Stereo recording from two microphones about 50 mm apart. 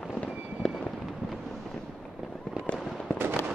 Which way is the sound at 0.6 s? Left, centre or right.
Centre.